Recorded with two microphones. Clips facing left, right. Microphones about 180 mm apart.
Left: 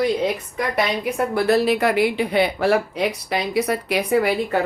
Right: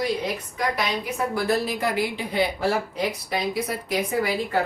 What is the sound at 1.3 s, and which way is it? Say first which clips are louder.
Speech: left 8 dB; 70° left (ahead or behind).